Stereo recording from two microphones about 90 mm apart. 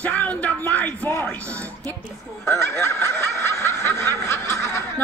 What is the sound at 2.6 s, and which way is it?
Snicker, 30° left (ahead or behind).